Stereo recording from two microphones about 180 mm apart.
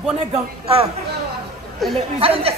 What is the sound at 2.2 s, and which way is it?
Speech, 30° right (ahead or behind).